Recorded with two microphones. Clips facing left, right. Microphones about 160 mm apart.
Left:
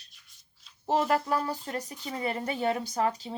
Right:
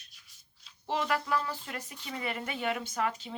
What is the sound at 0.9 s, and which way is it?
Speech, 35° left (ahead or behind).